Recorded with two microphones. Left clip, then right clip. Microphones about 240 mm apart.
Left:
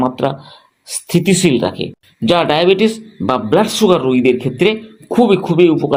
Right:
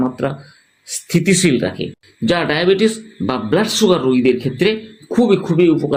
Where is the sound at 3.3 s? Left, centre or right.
Centre.